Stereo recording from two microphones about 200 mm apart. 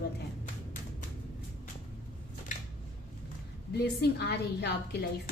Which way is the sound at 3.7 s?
55° left (ahead or behind).